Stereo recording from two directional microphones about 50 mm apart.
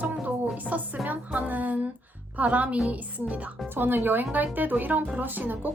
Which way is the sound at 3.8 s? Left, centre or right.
Right.